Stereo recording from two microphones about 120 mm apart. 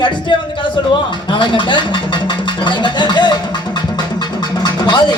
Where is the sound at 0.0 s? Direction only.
40° left (ahead or behind).